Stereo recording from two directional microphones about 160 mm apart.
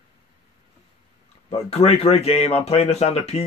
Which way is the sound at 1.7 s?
40° left (ahead or behind).